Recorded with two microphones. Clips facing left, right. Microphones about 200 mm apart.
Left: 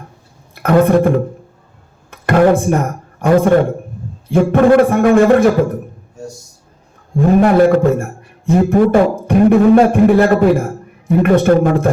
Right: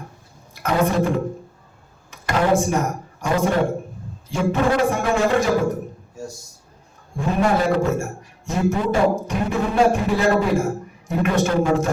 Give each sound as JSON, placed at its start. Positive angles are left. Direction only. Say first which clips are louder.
{"t": 0.5, "sound": "a man's voice", "louder": "left 9 dB", "side_deg": 55}
{"t": 2.0, "sound": "a sound", "louder": "left 8 dB", "side_deg": 60}
{"t": 3.2, "sound": "a man's voice", "louder": "left 9 dB", "side_deg": 55}
{"t": 7.2, "sound": "a man's voice", "louder": "left 10 dB", "side_deg": 55}